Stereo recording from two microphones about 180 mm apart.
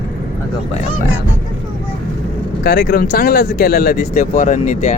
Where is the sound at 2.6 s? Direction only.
60° left (ahead or behind); by 4.9 s 45° left (ahead or behind).